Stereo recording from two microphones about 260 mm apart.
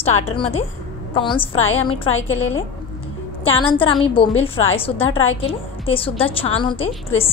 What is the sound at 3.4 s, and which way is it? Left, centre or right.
A woman's voice, centre.